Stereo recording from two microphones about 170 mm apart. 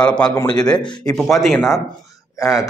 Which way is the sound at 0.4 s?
25° left (ahead or behind).